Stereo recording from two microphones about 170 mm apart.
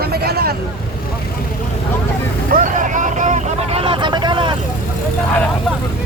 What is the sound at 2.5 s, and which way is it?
Vehicle, 50° right (ahead or behind).